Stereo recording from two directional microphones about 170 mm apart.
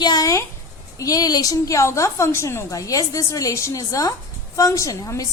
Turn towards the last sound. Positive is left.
turn(degrees=20)  # may be behind; listen again after turning